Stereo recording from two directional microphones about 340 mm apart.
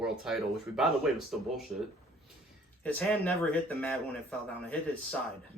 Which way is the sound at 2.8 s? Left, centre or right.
Centre.